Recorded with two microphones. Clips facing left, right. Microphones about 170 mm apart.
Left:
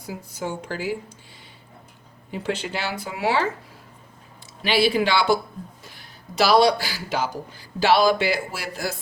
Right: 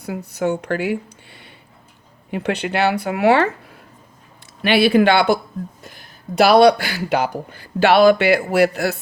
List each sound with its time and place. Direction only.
0.0 s speech: 65° right (ahead or behind)
4.6 s speech: 60° right (ahead or behind)